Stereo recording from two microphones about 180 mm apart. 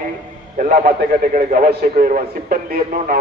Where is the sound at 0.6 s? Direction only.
45° right (ahead or behind).